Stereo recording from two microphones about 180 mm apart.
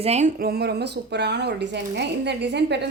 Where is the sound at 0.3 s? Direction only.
60° right (ahead or behind).